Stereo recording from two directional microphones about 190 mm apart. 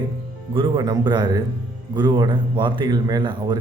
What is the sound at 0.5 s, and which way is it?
Speech, 25° right (ahead or behind).